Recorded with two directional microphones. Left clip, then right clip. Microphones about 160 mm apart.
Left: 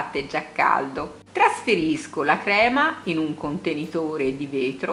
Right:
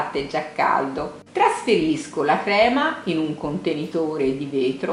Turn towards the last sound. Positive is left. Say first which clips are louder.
# right 3 dB
turn(degrees=15)  # may be behind; listen again after turning